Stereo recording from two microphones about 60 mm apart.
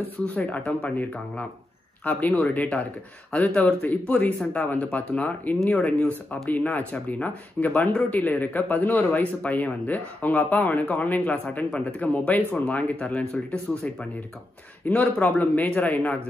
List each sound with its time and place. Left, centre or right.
0.7 s speech: left